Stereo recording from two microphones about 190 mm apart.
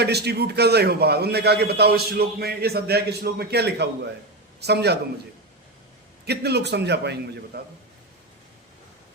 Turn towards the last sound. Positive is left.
turn(degrees=-60)  # may be behind; listen again after turning